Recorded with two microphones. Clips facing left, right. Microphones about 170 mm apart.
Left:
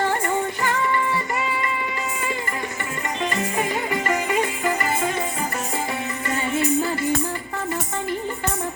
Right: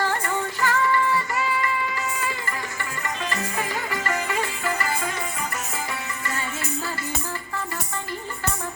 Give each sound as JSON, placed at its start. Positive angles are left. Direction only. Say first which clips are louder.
{"t": 0.0, "sound": "music", "louder": "left 3 dB", "side_deg": 20}
{"t": 3.2, "sound": "music", "louder": "left 6 dB", "side_deg": 20}
{"t": 6.2, "sound": "music", "louder": "left 10 dB", "side_deg": 20}